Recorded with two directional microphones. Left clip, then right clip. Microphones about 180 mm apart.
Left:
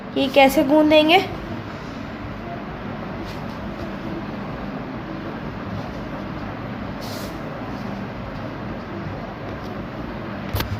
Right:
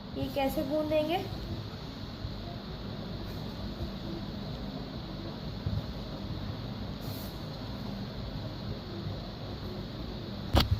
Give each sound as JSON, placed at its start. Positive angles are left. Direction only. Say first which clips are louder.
{"t": 0.2, "sound": "a woman's voice", "louder": "left 17 dB", "side_deg": 40}